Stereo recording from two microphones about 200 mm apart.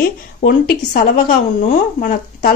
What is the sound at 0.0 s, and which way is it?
A woman's voice, 50° left (ahead or behind).